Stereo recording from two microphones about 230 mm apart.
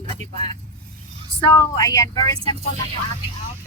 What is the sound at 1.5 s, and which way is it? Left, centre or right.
Speech, centre.